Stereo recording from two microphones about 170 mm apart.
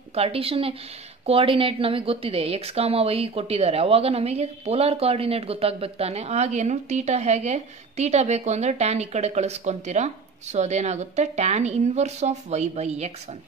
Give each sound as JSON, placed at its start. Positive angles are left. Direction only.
{"t": 0.1, "sound": "a woman's voice", "side_deg": -35}